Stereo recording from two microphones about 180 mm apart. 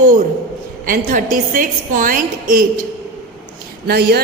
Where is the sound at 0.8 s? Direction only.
50° right (ahead or behind).